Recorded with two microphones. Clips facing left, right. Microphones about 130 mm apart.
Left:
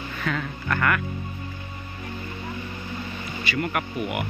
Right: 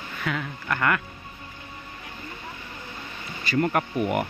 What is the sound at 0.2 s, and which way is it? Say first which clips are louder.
Speech: left 1 dB; 10° right (ahead or behind).